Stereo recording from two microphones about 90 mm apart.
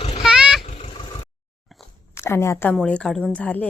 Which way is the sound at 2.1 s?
30° left (ahead or behind).